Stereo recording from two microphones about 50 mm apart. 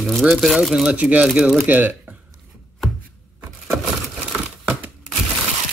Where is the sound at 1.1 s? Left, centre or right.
Right.